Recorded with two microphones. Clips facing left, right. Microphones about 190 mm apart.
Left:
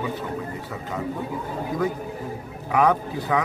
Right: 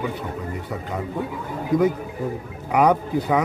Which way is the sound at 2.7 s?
15° right (ahead or behind).